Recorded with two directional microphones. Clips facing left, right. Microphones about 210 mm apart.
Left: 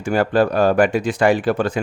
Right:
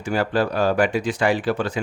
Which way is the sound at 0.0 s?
50° left (ahead or behind).